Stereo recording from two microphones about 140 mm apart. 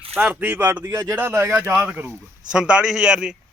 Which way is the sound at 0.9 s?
25° right (ahead or behind).